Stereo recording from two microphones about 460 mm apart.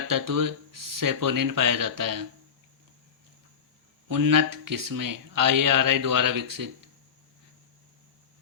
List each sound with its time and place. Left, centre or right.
0.1 s speech: right
4.1 s speech: right